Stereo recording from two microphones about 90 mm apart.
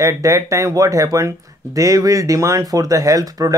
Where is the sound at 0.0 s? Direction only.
35° right (ahead or behind).